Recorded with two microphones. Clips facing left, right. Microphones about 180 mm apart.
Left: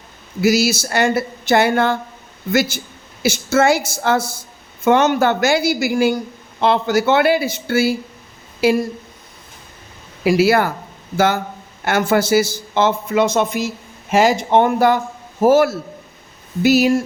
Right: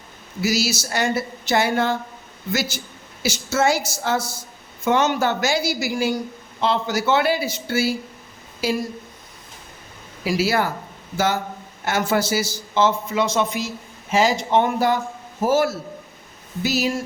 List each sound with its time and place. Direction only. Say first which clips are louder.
0.4 s speech: left 7 dB; 55° left (ahead or behind)
10.2 s speech: left 7 dB; 60° left (ahead or behind)
11.9 s speech: left 5 dB; 60° left (ahead or behind)
14.1 s speech: left 4 dB; 60° left (ahead or behind)